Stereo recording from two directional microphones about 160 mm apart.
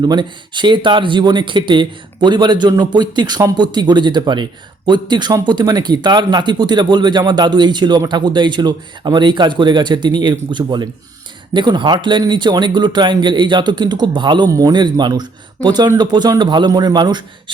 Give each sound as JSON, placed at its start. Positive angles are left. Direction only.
{"t": 0.0, "sound": "speech", "side_deg": -30}